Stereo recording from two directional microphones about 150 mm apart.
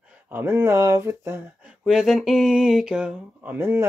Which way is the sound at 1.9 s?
Centre (ahead or behind).